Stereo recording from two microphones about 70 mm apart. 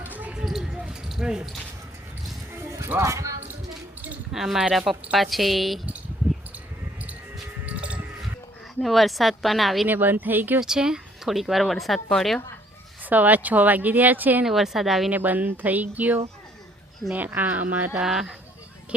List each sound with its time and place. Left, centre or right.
0.0 s basketball bounce: right
0.3 s basketball bounce: centre
2.5 s a sound: right
3.0 s speech: right
4.3 s speech: centre
7.6 s music: centre
8.8 s speech: centre
9.8 s speech: right
10.6 s speech: centre
13.1 s speech: right
14.4 s speech: centre
15.1 s speech: right
18.0 s speech: centre